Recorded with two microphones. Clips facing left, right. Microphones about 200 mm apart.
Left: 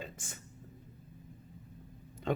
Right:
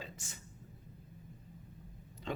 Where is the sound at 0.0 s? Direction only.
50° left (ahead or behind).